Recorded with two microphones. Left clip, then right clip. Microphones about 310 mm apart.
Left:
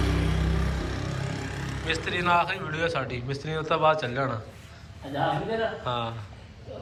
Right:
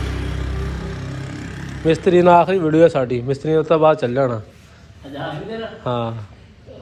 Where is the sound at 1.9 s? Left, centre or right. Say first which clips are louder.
Right 13 dB; centre.